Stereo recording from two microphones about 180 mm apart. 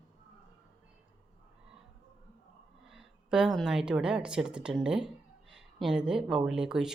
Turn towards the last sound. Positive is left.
turn(degrees=-5)  # may be behind; listen again after turning